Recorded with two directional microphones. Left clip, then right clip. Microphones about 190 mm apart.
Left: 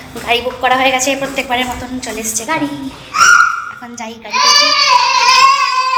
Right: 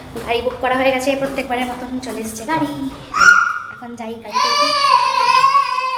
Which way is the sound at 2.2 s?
25° left (ahead or behind).